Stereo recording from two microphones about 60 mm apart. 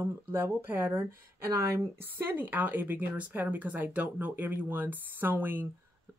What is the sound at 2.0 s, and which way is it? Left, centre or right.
A woman's voice, right.